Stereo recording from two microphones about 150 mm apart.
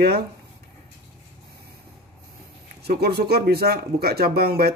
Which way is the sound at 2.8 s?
90° right.